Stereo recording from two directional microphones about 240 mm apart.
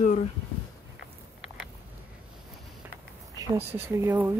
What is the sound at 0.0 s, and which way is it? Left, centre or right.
Speech, left.